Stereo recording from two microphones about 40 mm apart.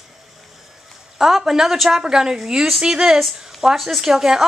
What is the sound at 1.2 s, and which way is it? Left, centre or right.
Speech, centre.